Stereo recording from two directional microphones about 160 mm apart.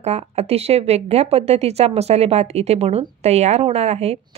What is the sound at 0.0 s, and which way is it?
Speech, 40° right (ahead or behind).